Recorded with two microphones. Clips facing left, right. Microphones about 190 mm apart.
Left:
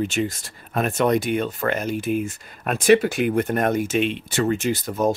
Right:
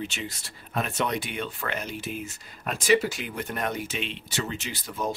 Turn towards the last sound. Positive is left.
turn(degrees=45)  # may be behind; listen again after turning